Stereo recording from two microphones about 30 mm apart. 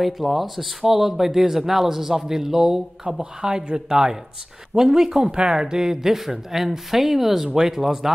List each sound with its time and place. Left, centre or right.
0.0 s speech: centre
3.3 s speech: right
4.7 s speech: centre
5.2 s speech: right; by 8.1 s centre